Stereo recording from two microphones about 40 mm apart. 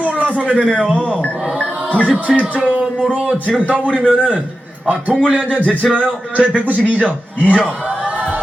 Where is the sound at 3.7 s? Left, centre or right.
Right.